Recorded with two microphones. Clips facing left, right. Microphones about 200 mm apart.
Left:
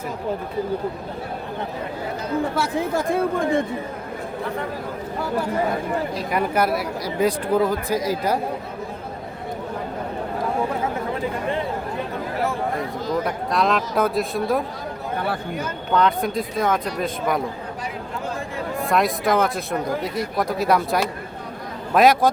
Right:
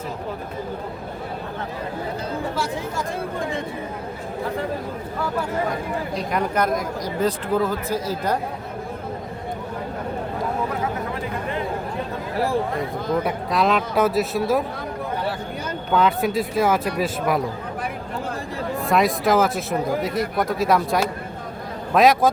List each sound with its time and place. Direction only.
2.6 s speech: 55° left (ahead or behind)
6.1 s speech: 5° left (ahead or behind)
13.2 s speech: centre (ahead or behind)
15.9 s speech: 5° right (ahead or behind)
18.9 s speech: centre (ahead or behind)